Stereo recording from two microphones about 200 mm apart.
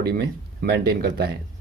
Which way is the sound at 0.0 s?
50° right (ahead or behind).